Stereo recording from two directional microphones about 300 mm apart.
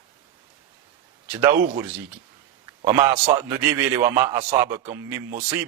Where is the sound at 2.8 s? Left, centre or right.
Centre.